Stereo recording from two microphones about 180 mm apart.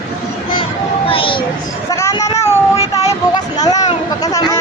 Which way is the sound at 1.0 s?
30° left (ahead or behind).